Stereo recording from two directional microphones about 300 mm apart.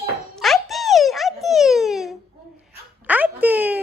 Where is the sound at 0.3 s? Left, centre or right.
Centre.